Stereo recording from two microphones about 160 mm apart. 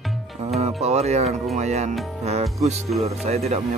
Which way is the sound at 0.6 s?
40° right (ahead or behind).